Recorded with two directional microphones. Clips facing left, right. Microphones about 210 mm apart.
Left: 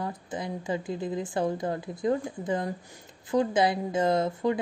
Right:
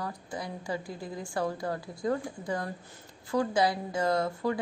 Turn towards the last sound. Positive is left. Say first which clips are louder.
# left 3 dB
turn(degrees=20)  # may be behind; listen again after turning